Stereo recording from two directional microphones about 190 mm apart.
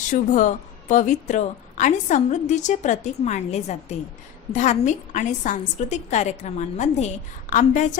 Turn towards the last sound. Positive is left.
turn(degrees=40)  # may be behind; listen again after turning